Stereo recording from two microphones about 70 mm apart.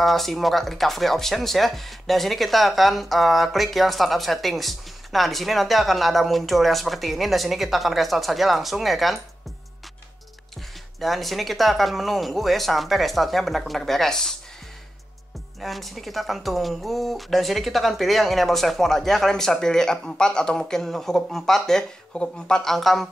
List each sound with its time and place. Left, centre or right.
0.0 s speech: centre
11.0 s speech: centre
15.6 s speech: centre